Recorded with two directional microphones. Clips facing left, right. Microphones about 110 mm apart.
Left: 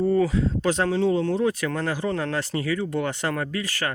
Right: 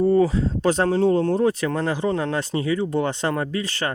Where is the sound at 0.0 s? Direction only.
30° right (ahead or behind).